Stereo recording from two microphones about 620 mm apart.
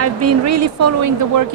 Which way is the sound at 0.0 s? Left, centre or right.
Right.